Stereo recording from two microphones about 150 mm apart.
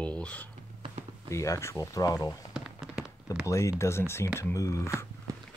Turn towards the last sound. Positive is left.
turn(degrees=20)  # may be behind; listen again after turning